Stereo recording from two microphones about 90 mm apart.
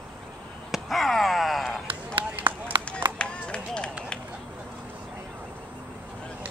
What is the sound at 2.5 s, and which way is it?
Run, 65° right (ahead or behind).